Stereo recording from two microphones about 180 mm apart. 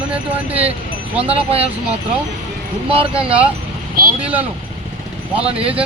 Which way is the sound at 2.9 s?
30° right (ahead or behind).